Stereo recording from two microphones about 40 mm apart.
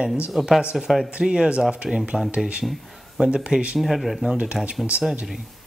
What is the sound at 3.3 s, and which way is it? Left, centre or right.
Speech, centre.